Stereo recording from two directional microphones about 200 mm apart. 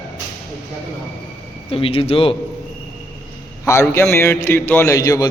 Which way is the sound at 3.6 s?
15° left (ahead or behind).